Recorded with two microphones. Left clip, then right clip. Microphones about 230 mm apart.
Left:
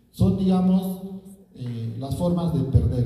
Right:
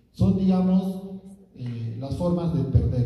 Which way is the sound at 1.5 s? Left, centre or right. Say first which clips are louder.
Left 2 dB; left.